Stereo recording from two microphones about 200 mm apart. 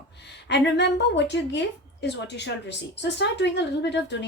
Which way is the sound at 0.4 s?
60° left (ahead or behind).